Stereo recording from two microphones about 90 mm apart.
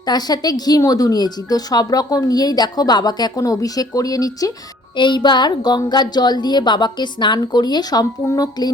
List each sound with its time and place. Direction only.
0.0 s speech: 50° left (ahead or behind)
4.9 s speech: 60° left (ahead or behind)